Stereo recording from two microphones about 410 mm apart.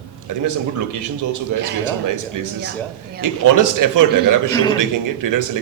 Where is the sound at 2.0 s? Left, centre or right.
Right.